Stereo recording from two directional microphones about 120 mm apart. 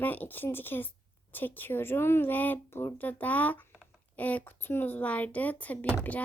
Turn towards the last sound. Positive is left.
turn(degrees=10)  # may be behind; listen again after turning